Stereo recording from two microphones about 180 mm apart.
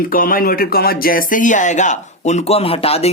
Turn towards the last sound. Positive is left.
turn(degrees=35)  # may be behind; listen again after turning